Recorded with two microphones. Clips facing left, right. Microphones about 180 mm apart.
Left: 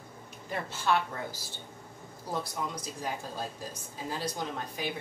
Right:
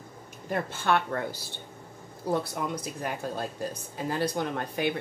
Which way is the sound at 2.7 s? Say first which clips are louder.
Right 4 dB; 60° right (ahead or behind).